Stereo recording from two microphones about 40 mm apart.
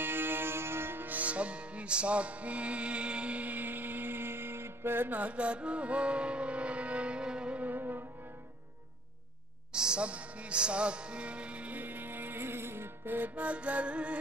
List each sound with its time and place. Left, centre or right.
0.0 s music: right
1.1 s music: right
3.4 s music: right
5.1 s music: right
7.7 s music: right
9.7 s music: right
11.8 s music: right
13.3 s music: right